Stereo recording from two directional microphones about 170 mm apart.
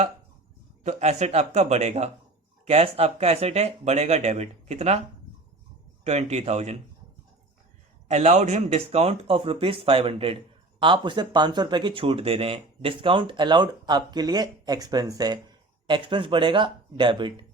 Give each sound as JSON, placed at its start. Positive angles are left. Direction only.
{"t": 0.9, "sound": "speech", "side_deg": -40}
{"t": 6.1, "sound": "speech", "side_deg": -40}
{"t": 8.0, "sound": "speech", "side_deg": -40}